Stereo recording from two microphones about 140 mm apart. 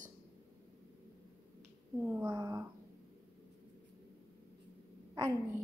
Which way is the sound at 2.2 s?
25° right (ahead or behind).